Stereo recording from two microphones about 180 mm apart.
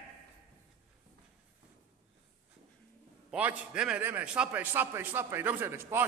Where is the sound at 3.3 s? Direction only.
5° right (ahead or behind).